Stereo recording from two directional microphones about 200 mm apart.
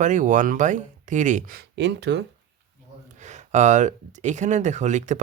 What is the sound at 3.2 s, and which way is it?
Speech, 35° right (ahead or behind).